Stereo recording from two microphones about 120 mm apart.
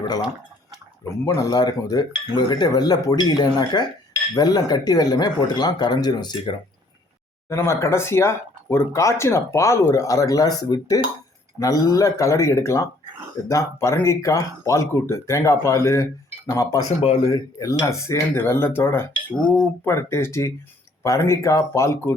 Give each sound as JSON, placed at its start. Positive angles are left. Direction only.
{"t": 1.2, "sound": "cutlery", "side_deg": 35}
{"t": 7.5, "sound": "speech", "side_deg": 25}
{"t": 19.4, "sound": "speech", "side_deg": 10}
{"t": 19.8, "sound": "speech", "side_deg": 20}